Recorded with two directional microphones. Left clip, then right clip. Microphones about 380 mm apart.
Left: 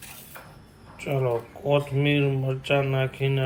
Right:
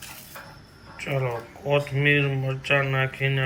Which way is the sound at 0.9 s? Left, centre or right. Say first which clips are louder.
Even; centre.